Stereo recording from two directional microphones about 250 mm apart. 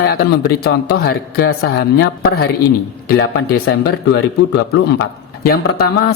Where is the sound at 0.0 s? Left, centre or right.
Left.